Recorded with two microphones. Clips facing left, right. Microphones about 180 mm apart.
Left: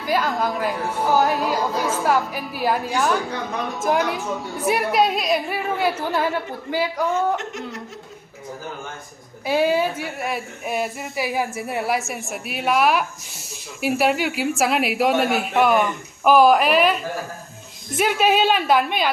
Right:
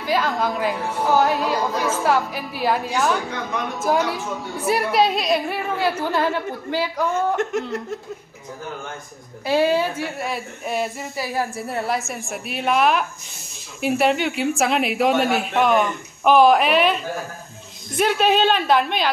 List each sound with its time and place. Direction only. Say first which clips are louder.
0.0 s a woman's voice: even; centre (ahead or behind)
7.3 s speech: right 6 dB; 55° right (ahead or behind)
9.5 s a woman's voice: right 1 dB; 10° left (ahead or behind)